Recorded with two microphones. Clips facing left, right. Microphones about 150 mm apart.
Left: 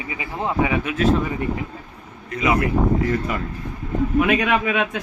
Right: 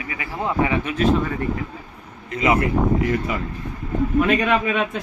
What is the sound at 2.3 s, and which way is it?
Speech, 20° right (ahead or behind).